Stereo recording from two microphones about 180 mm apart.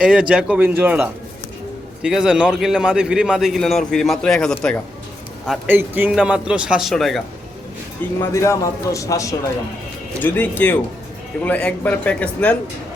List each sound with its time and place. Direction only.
0.0 s a man's voice: 5° right (ahead or behind)
5.6 s a man's voice: 10° right (ahead or behind)
8.2 s a man's voice: 15° left (ahead or behind)